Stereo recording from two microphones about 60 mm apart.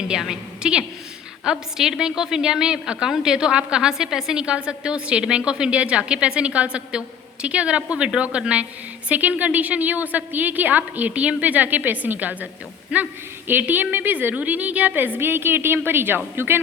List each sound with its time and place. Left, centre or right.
0.1 s a woman's voice: centre; by 16.6 s right